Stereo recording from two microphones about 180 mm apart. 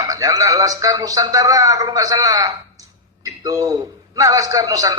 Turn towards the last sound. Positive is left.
turn(degrees=-20)  # may be behind; listen again after turning